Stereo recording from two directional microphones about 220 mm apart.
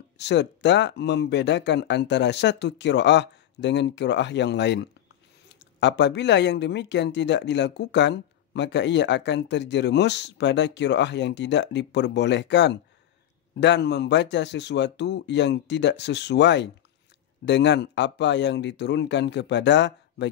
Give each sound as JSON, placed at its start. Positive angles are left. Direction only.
{"t": 0.2, "sound": "speech", "side_deg": 50}